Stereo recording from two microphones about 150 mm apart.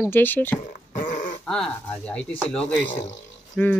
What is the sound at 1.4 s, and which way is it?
Speech, 5° left (ahead or behind).